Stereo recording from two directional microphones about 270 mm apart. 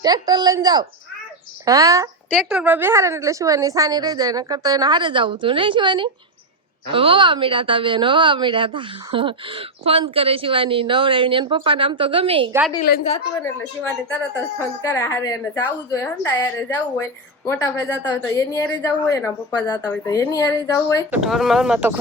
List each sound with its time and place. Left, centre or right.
0.0 s a woman's voice: centre
2.3 s a woman's voice: centre
12.9 s a woman's voice: left
14.8 s speech: centre
21.1 s speech: centre